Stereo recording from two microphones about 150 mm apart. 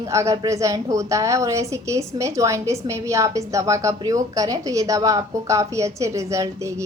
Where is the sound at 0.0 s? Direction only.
20° right (ahead or behind).